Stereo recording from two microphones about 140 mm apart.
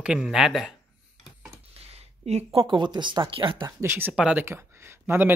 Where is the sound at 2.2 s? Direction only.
45° right (ahead or behind).